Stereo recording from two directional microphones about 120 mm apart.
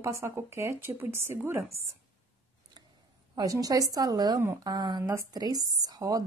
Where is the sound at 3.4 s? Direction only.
30° right (ahead or behind).